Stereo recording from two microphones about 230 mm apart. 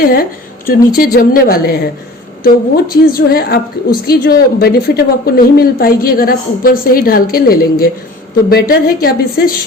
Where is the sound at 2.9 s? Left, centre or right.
Left.